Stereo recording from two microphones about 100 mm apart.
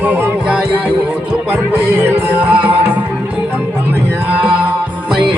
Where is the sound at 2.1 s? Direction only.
20° right (ahead or behind).